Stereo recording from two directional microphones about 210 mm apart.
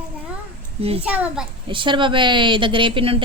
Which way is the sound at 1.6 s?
25° right (ahead or behind).